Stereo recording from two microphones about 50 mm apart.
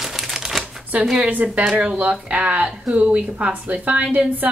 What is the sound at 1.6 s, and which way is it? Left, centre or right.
A woman's voice, centre.